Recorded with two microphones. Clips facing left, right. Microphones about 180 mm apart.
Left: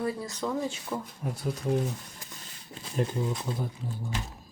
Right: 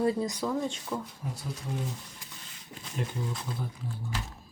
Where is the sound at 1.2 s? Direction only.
60° left (ahead or behind).